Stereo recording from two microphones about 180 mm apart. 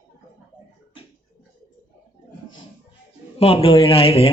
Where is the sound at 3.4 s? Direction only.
30° left (ahead or behind).